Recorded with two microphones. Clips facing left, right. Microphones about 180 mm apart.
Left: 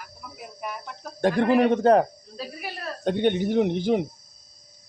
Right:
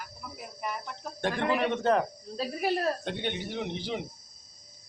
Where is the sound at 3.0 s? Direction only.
50° left (ahead or behind).